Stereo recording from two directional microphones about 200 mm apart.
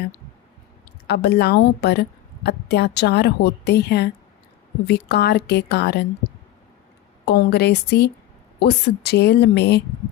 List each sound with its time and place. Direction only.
1.0 s a woman's voice: 55° left (ahead or behind)
7.3 s a woman's voice: 55° left (ahead or behind)